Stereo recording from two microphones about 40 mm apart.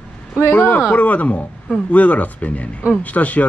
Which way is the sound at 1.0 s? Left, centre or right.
Left.